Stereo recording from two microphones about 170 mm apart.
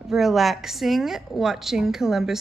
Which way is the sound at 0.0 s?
Centre (ahead or behind).